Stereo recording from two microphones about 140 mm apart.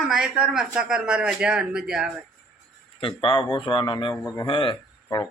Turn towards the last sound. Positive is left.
turn(degrees=35)  # may be behind; listen again after turning